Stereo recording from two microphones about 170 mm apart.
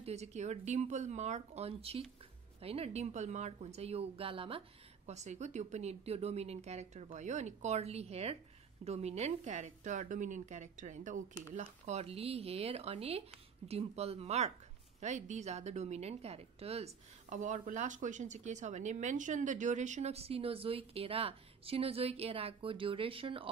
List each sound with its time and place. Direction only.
0.0 s a woman's voice: 40° right (ahead or behind)